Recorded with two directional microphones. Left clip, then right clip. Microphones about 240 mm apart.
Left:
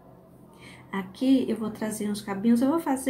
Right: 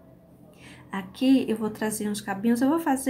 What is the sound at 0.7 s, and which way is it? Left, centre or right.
Speech, centre.